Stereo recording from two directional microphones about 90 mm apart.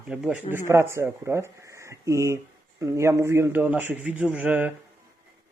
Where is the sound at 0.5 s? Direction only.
30° right (ahead or behind).